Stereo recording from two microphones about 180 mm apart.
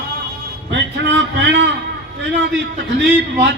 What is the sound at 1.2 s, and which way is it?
Speech, 85° right.